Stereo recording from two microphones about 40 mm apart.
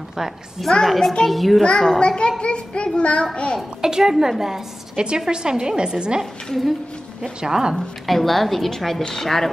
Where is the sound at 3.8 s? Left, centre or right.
Centre.